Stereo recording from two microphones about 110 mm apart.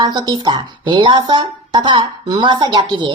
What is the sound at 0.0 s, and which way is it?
A woman's voice, 40° right (ahead or behind).